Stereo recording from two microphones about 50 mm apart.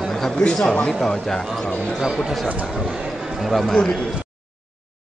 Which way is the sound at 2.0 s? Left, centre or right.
Centre.